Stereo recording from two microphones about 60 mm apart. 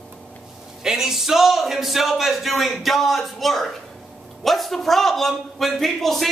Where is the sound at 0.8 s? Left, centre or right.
Centre.